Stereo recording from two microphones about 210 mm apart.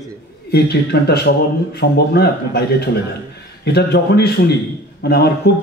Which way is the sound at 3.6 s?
50° left (ahead or behind).